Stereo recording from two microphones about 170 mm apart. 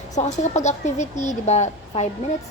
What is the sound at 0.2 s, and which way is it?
A woman's voice, 45° left (ahead or behind).